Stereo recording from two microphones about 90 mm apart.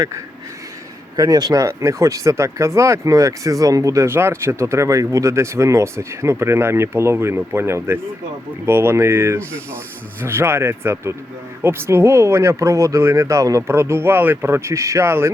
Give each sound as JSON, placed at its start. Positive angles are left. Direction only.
{"t": 1.1, "sound": "speech", "side_deg": -45}